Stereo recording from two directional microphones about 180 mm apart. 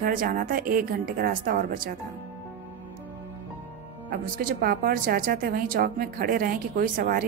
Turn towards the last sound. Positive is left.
turn(degrees=-55)  # may be behind; listen again after turning